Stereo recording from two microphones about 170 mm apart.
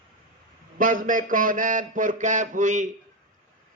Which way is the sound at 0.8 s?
55° right (ahead or behind).